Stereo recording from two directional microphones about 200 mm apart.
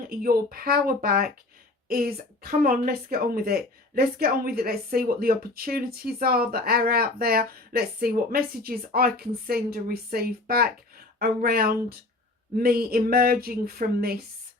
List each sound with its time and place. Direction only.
0.2 s speech: 45° right (ahead or behind)